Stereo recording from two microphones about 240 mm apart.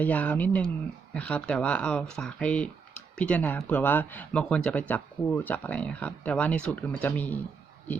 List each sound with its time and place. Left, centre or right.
0.0 s speech: centre